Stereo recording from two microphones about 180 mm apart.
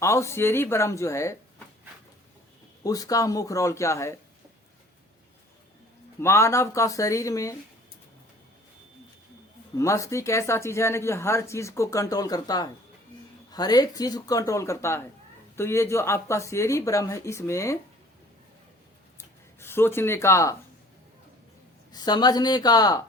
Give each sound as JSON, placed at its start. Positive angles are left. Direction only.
{"t": 0.0, "sound": "speech", "side_deg": 15}
{"t": 2.8, "sound": "speech", "side_deg": 20}
{"t": 6.1, "sound": "speech", "side_deg": 15}
{"t": 9.7, "sound": "speech", "side_deg": 15}
{"t": 19.1, "sound": "speech", "side_deg": 15}
{"t": 21.9, "sound": "speech", "side_deg": 20}